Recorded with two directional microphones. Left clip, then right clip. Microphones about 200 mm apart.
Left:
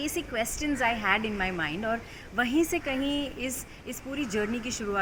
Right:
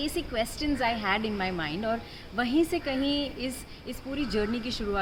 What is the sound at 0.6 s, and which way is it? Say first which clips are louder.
A woman's voice: left 2 dB; centre (ahead or behind).